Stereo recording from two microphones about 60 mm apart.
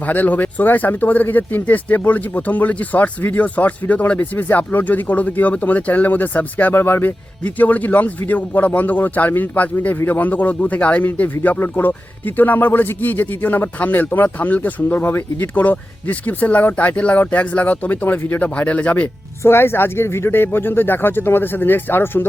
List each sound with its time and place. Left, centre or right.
0.1 s speech: left
19.4 s speech: left